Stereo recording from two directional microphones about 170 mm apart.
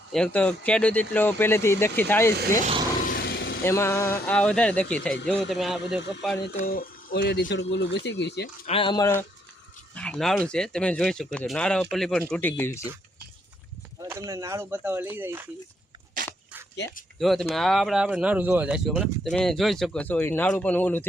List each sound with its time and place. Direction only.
0.1 s speech: 5° left (ahead or behind)
3.0 s vehicle: 60° left (ahead or behind)
3.6 s speech: 15° left (ahead or behind); by 6.0 s centre (ahead or behind)
6.7 s speech: 60° left (ahead or behind); by 8.4 s 90° left
8.6 s speech: 30° left (ahead or behind)
9.9 s speech: 5° left (ahead or behind)
14.0 s speech: 20° right (ahead or behind)
17.2 s speech: centre (ahead or behind)